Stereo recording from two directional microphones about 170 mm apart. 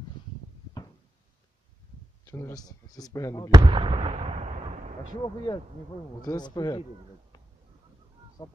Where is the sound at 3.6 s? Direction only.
30° right (ahead or behind).